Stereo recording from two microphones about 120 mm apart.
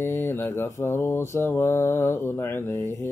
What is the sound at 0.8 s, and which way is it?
Speech, 20° left (ahead or behind).